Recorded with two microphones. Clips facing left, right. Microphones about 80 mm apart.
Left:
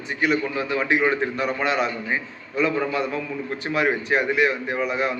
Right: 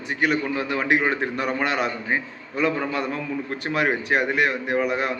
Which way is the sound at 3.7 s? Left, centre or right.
Right.